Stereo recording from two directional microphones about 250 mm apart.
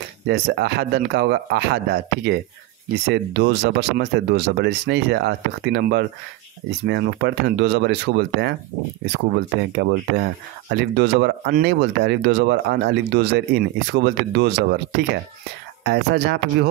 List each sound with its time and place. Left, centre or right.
0.3 s speech: right